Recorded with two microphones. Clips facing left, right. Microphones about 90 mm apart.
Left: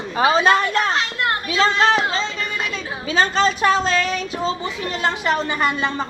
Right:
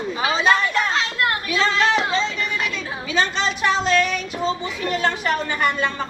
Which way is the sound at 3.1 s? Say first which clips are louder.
Left 4 dB; 40° left (ahead or behind).